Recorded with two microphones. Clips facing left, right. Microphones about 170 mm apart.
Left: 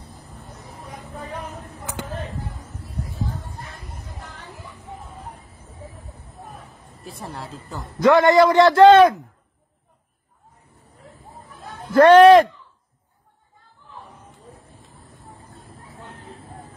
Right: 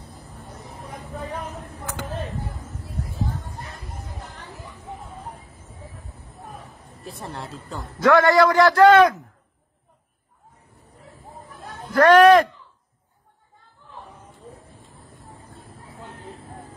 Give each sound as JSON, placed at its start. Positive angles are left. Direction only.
{"t": 7.1, "sound": "a woman's voice", "side_deg": 0}
{"t": 8.0, "sound": "a man's voice", "side_deg": 20}
{"t": 11.9, "sound": "a man's voice", "side_deg": 25}